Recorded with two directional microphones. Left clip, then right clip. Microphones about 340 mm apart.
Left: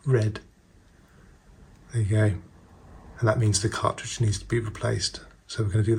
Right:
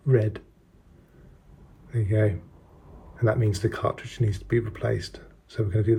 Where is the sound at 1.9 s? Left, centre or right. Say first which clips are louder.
Right 2 dB; centre.